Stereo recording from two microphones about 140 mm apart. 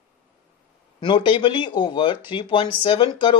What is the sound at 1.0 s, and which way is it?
Speech, 35° left (ahead or behind).